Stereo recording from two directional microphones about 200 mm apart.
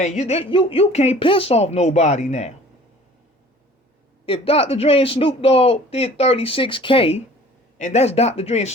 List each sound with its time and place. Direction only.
0.0 s speech: 35° left (ahead or behind)
4.3 s a man's voice: 30° left (ahead or behind)